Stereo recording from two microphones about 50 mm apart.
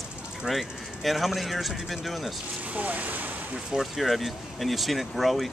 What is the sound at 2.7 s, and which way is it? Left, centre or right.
Speech, right.